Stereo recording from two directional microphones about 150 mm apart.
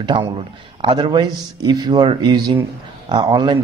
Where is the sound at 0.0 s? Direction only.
30° right (ahead or behind).